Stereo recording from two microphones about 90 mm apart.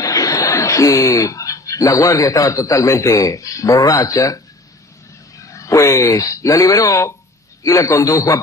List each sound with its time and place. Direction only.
0.0 s speech: 40° left (ahead or behind)
5.4 s a man's voice: 35° left (ahead or behind)